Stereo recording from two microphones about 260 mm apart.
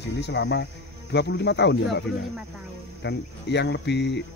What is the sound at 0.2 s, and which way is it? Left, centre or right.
Cricket, left.